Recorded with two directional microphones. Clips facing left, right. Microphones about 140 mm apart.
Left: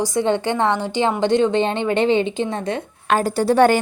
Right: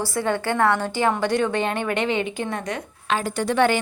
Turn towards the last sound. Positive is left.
turn(degrees=40)  # may be behind; listen again after turning